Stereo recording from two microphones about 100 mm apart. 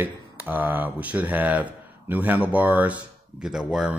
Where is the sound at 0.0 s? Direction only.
20° right (ahead or behind).